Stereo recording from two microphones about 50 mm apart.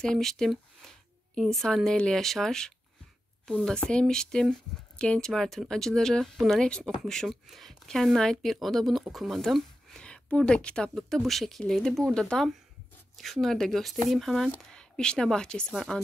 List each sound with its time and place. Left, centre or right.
0.0 s speech: centre
10.0 s a woman's voice: centre
11.2 s speech: centre
13.1 s speech: centre
14.6 s speech: centre